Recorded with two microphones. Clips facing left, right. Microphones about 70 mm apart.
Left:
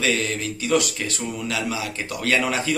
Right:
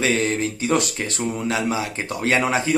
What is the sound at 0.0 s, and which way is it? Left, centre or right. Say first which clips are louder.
Speech: right 3 dB; right.